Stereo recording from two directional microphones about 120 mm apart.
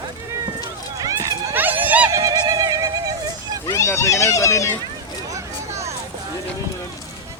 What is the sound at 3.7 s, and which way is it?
Speech, 25° left (ahead or behind).